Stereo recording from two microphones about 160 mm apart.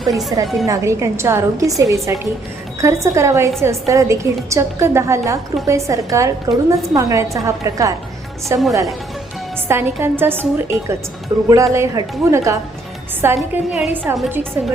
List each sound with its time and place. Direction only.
0.6 s a woman's voice: 20° right (ahead or behind)